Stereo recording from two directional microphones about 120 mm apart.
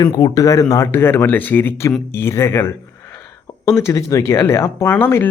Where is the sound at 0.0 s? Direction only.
35° left (ahead or behind).